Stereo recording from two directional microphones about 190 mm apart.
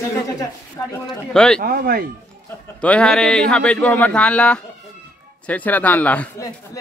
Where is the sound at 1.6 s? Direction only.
50° right (ahead or behind).